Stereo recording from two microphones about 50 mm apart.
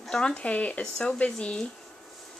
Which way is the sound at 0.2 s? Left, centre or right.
Left.